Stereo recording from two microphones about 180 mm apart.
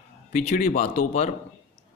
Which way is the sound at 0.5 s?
40° left (ahead or behind).